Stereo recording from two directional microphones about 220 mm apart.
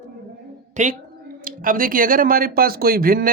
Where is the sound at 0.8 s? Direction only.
35° right (ahead or behind).